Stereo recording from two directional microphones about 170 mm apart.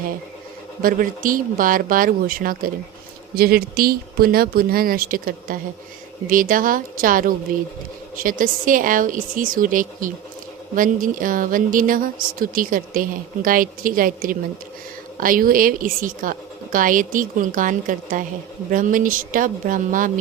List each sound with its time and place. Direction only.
0.8 s speech: 55° right (ahead or behind)